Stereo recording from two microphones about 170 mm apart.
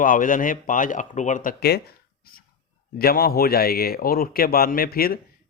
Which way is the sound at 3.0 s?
65° left (ahead or behind).